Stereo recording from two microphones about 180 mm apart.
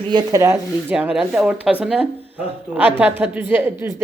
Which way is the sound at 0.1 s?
20° right (ahead or behind).